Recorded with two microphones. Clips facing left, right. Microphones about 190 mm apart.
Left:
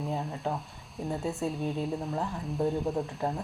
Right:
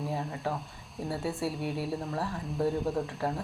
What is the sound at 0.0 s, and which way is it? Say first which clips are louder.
Speech: left 1 dB; centre (ahead or behind).